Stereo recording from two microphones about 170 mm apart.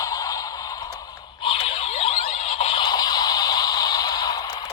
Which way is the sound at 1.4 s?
30° left (ahead or behind).